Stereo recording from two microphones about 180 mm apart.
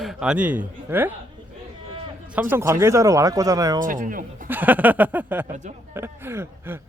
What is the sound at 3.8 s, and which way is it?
Speech, 50° right (ahead or behind).